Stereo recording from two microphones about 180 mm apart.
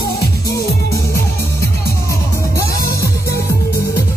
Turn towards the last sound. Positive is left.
turn(degrees=15)  # may be behind; listen again after turning